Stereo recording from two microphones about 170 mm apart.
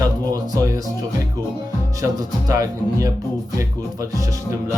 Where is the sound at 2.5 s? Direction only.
20° right (ahead or behind).